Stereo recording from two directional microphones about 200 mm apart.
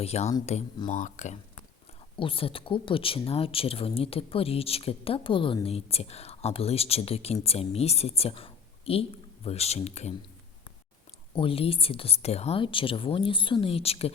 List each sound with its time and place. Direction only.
0.0 s speech: 30° left (ahead or behind)
2.1 s a woman's voice: 25° left (ahead or behind)
11.3 s speech: 30° left (ahead or behind)